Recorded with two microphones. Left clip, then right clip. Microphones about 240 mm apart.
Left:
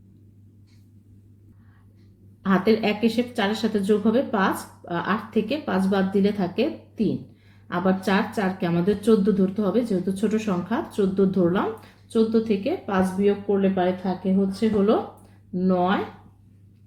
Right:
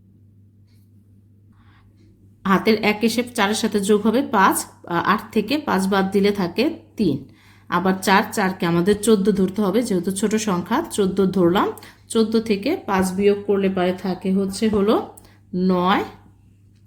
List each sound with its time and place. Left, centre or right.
2.4 s a woman's voice: right